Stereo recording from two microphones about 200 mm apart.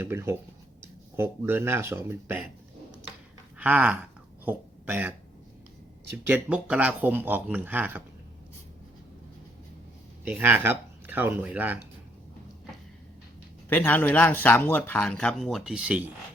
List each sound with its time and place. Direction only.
0.0 s speech: 10° right (ahead or behind)
3.6 s speech: 5° right (ahead or behind)
6.2 s speech: 10° right (ahead or behind)
10.2 s speech: 10° right (ahead or behind)
13.7 s speech: 10° left (ahead or behind); by 16.1 s 5° right (ahead or behind)